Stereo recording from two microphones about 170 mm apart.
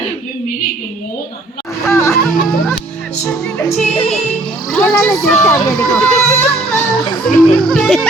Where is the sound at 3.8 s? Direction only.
40° left (ahead or behind).